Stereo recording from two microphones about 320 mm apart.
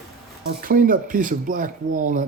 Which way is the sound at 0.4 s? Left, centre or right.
Right.